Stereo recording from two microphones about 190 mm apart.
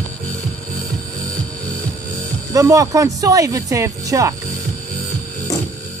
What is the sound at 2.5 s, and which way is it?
Speech, 15° right (ahead or behind).